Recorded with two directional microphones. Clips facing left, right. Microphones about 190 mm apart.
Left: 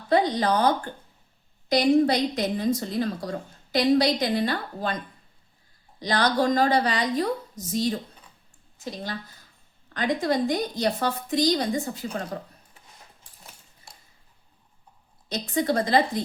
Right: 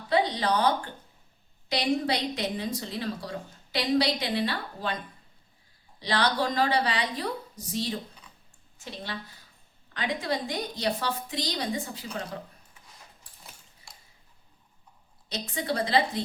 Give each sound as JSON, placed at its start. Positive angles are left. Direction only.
{"t": 0.1, "sound": "a woman's voice", "side_deg": 45}
{"t": 1.7, "sound": "a woman's voice", "side_deg": 45}
{"t": 6.0, "sound": "a woman's voice", "side_deg": 45}
{"t": 15.3, "sound": "a woman's voice", "side_deg": 45}